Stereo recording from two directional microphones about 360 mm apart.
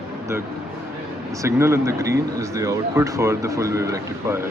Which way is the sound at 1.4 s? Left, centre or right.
Centre.